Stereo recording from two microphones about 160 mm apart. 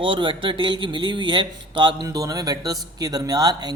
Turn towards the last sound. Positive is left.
turn(degrees=-25)  # may be behind; listen again after turning